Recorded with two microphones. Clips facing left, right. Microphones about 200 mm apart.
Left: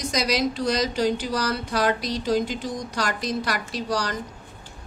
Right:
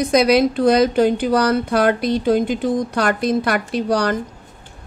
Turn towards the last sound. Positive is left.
turn(degrees=-60)  # may be behind; listen again after turning